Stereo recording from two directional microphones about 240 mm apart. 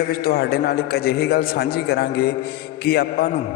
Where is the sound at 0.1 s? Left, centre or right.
Left.